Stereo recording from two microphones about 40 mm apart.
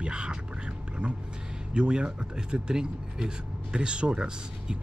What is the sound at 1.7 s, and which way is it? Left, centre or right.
Speech, right.